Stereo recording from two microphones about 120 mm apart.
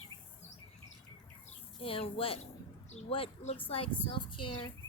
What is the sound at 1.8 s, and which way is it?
A woman's voice, 50° left (ahead or behind).